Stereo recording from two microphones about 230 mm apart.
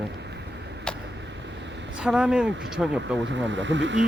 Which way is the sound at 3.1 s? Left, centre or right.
Right.